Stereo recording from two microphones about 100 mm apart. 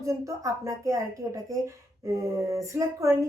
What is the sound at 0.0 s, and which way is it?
Speech, 30° right (ahead or behind).